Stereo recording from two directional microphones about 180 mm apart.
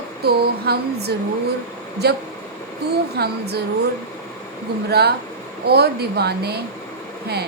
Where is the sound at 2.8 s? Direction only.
65° right (ahead or behind).